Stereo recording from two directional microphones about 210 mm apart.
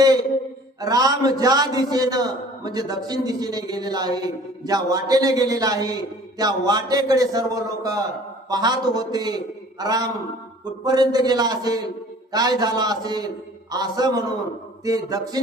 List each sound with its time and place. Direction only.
0.8 s a man's voice: 15° right (ahead or behind)